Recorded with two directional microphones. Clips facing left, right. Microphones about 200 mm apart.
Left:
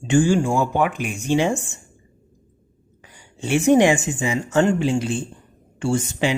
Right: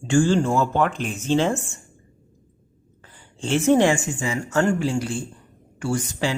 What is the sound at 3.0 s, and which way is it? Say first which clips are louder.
Speech: left 1 dB; 15° left (ahead or behind).